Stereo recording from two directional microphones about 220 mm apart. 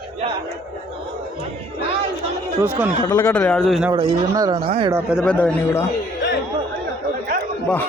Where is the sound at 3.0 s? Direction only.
15° left (ahead or behind).